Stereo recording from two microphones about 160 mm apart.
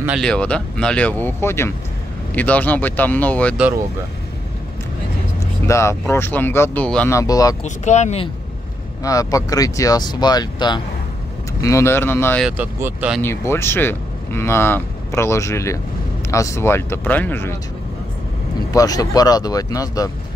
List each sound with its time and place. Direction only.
0.2 s speech: 5° left (ahead or behind)
5.7 s speech: 20° left (ahead or behind)
7.2 s speech: 25° left (ahead or behind)
7.6 s speech: 45° left (ahead or behind)
9.0 s speech: 20° left (ahead or behind)
12.4 s speech: 10° right (ahead or behind)
13.2 s speech: 15° left (ahead or behind)
18.7 s speech: 25° left (ahead or behind)